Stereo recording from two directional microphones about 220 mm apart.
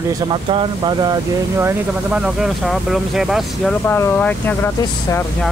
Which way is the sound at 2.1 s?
5° right (ahead or behind).